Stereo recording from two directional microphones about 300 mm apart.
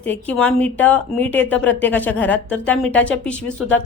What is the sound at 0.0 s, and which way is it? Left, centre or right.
A woman's voice, centre.